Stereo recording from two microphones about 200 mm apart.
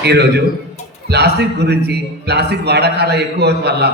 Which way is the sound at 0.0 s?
55° right (ahead or behind).